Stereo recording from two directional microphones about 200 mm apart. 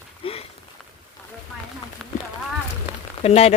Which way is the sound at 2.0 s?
Centre (ahead or behind).